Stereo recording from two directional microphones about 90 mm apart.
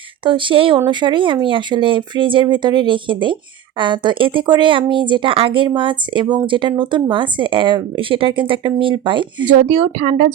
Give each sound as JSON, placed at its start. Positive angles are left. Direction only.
{"t": 0.3, "sound": "speech", "side_deg": -70}
{"t": 0.9, "sound": "speech", "side_deg": -60}
{"t": 5.6, "sound": "speech", "side_deg": -65}